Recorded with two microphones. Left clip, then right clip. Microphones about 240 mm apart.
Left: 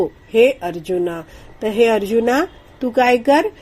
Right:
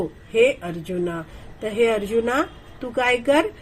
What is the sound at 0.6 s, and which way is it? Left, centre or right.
Speech, left.